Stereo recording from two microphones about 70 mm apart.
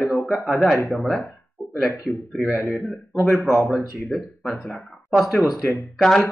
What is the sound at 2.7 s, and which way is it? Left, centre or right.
Speech, centre.